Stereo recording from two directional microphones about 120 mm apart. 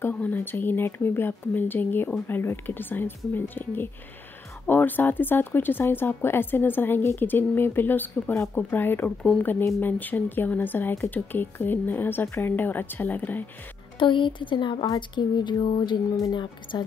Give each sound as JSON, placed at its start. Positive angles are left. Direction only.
{"t": 0.0, "sound": "speech", "side_deg": 15}
{"t": 13.9, "sound": "speech", "side_deg": 40}